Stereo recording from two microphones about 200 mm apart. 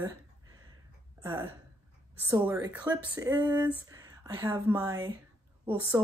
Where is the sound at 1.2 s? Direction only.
15° right (ahead or behind).